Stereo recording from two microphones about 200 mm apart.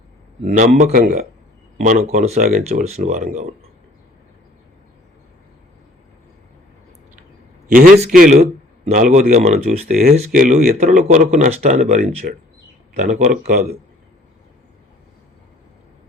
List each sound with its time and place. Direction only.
0.4 s a man's voice: 45° right (ahead or behind)
7.7 s a man's voice: 45° right (ahead or behind)
10.3 s a man's voice: 45° right (ahead or behind)